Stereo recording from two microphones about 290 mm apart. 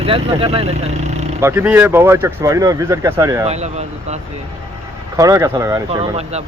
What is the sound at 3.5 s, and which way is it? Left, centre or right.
Speech, right.